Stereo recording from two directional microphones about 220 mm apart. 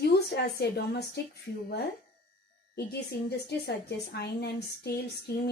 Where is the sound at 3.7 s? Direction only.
50° left (ahead or behind).